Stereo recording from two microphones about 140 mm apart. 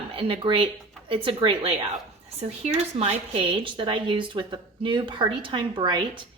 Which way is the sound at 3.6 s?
35° right (ahead or behind).